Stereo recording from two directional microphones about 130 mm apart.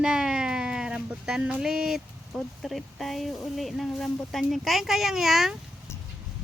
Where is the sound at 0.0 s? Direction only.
5° right (ahead or behind).